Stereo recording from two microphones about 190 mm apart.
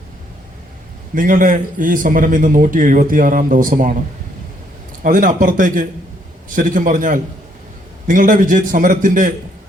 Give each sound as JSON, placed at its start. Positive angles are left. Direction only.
{"t": 1.1, "sound": "a man's voice", "side_deg": -45}
{"t": 5.0, "sound": "a man's voice", "side_deg": -45}